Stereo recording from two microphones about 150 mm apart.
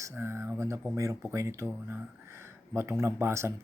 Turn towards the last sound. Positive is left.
turn(degrees=-20)  # may be behind; listen again after turning